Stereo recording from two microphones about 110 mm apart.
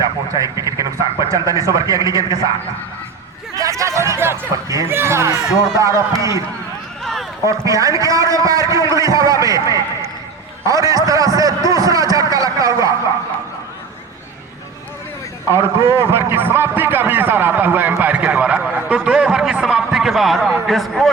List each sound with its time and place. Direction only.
0.0 s speech: 30° right (ahead or behind)
3.5 s a man's voice: 30° right (ahead or behind)
7.0 s a sound: centre (ahead or behind)
7.4 s a man's voice: 30° right (ahead or behind)
10.7 s a sound: 30° right (ahead or behind)
15.5 s a man's voice: 25° right (ahead or behind); by 21.1 s centre (ahead or behind)